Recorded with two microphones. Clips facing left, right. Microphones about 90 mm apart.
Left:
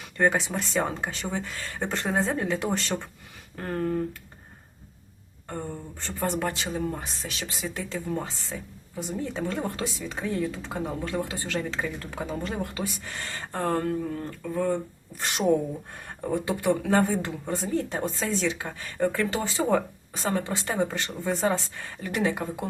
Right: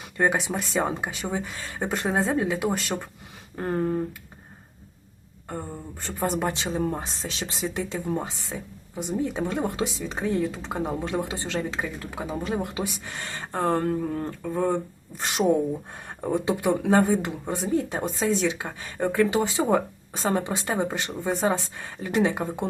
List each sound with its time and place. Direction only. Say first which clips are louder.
0.2 s speech: even; 15° right (ahead or behind)
3.5 s speech: right 2 dB; 20° right (ahead or behind)
5.5 s speech: even; 10° right (ahead or behind)
11.8 s speech: even; 10° right (ahead or behind); by 14.8 s 30° right (ahead or behind)
15.9 s speech: right 2 dB; 20° right (ahead or behind)